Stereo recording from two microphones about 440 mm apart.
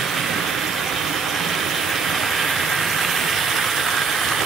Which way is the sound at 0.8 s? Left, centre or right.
Centre.